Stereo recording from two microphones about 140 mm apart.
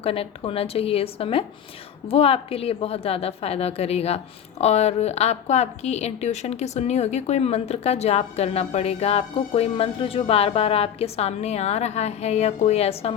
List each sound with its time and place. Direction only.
0.0 s a woman's voice: 45° left (ahead or behind)